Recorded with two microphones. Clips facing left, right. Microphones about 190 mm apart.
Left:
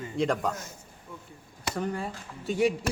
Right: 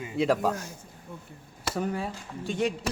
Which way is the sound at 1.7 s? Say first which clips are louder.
Right 2 dB; 5° right (ahead or behind).